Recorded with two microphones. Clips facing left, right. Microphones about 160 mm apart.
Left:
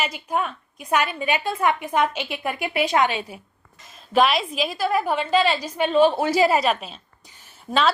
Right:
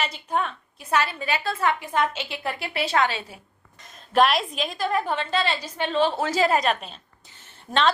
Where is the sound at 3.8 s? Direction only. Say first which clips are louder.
Left 1 dB; centre (ahead or behind).